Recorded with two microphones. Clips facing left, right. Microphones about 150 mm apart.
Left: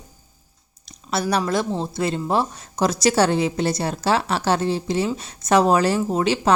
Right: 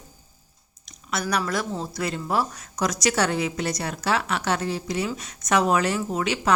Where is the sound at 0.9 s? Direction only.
30° left (ahead or behind).